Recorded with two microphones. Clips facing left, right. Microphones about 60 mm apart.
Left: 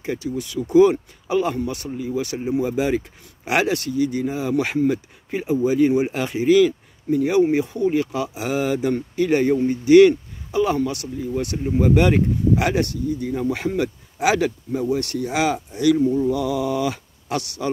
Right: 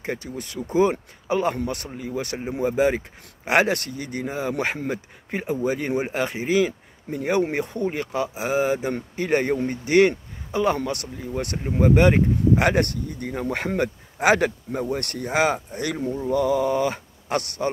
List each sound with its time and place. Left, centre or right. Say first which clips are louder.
0.0 s speech: left 4 dB; right
1.6 s speech: left 3 dB; right